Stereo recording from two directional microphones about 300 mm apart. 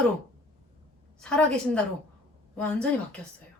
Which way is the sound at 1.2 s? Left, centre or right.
Centre.